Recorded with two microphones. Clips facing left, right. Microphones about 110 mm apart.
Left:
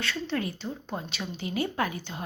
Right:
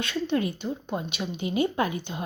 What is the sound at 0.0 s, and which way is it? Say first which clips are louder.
Speech: right 4 dB; 20° right (ahead or behind).